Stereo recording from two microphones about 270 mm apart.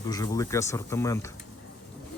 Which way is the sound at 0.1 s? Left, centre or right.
Centre.